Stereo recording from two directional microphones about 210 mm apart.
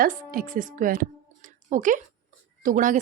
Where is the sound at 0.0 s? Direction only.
40° right (ahead or behind).